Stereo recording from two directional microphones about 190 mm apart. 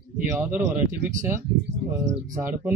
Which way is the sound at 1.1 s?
40° right (ahead or behind).